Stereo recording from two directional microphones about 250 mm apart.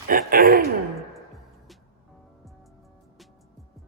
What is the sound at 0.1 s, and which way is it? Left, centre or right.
Gasp, right.